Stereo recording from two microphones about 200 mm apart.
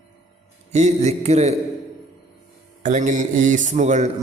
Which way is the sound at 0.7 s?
35° right (ahead or behind).